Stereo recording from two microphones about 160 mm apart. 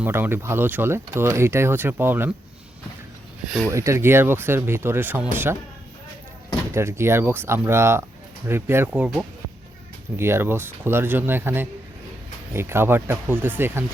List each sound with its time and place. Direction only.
0.0 s speech: 15° right (ahead or behind)
3.7 s speech: 20° right (ahead or behind)
6.7 s speech: 15° right (ahead or behind)
10.2 s speech: 15° right (ahead or behind)